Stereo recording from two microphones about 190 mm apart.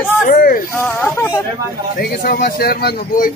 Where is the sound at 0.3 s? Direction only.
50° left (ahead or behind).